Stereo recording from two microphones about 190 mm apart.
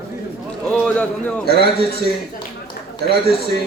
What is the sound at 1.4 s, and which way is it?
Speech, 55° left (ahead or behind).